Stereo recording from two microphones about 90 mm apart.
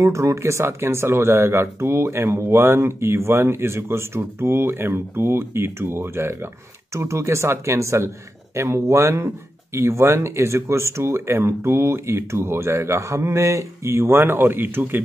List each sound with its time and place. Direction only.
0.0 s speech: 35° right (ahead or behind)